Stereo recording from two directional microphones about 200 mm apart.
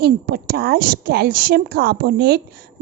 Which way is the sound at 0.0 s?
55° right (ahead or behind).